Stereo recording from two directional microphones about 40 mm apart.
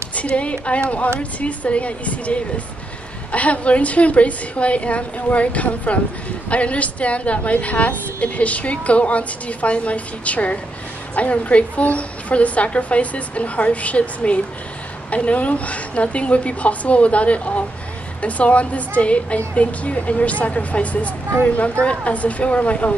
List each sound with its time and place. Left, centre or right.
0.1 s a woman's voice: left